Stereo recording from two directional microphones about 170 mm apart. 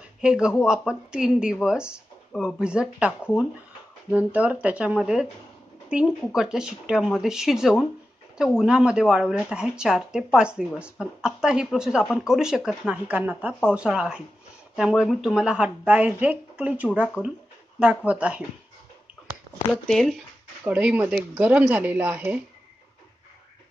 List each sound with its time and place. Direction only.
0.2 s speech: 5° right (ahead or behind)
19.7 s speech: centre (ahead or behind)